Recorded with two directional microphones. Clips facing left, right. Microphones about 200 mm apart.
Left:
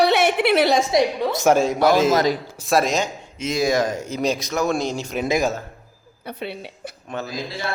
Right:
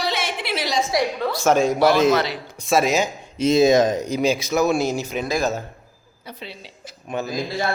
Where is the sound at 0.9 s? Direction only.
20° left (ahead or behind).